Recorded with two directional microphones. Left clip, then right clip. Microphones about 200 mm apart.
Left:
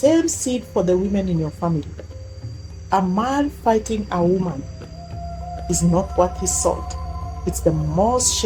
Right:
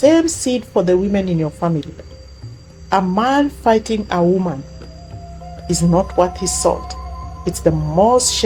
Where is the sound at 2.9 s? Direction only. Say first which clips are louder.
Right 4 dB; 30° right (ahead or behind).